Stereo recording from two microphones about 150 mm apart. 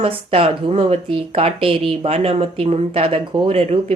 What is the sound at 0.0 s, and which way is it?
Speech, 40° right (ahead or behind).